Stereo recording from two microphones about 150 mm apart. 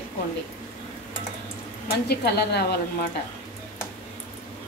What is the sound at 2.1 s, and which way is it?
Speech, 90° left.